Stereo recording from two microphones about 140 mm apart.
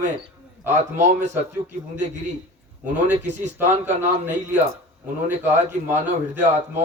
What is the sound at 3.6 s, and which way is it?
A man's voice, 15° right (ahead or behind).